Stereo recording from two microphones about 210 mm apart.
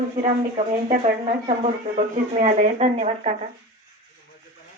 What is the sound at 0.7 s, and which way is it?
Speech, 30° right (ahead or behind).